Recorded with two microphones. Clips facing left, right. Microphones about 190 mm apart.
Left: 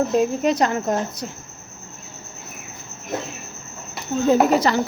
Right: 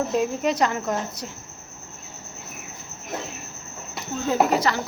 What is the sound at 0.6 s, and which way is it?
Speech, 40° left (ahead or behind).